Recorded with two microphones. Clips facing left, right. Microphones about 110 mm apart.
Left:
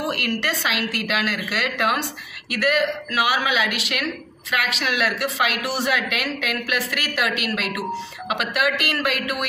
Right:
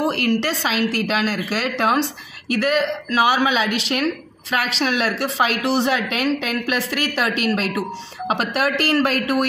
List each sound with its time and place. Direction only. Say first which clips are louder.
0.0 s speech: right 5 dB; 25° right (ahead or behind)